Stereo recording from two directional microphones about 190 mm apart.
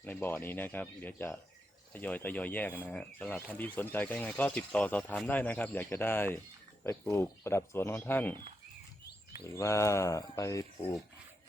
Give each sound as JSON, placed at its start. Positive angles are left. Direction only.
{"t": 0.0, "sound": "speech", "side_deg": 10}
{"t": 9.5, "sound": "speech", "side_deg": 15}